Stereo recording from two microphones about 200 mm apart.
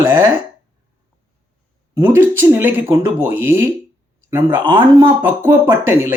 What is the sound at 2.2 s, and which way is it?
Speech, 10° right (ahead or behind).